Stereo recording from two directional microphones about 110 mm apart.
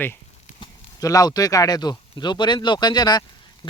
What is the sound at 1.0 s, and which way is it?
Speech, 35° left (ahead or behind).